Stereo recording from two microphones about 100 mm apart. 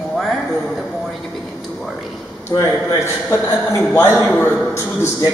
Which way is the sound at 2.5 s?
40° left (ahead or behind).